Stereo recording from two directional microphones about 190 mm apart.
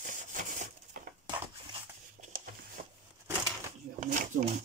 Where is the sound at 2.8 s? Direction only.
40° right (ahead or behind).